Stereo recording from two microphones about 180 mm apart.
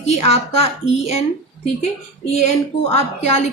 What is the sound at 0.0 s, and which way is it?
A woman's voice, 35° left (ahead or behind).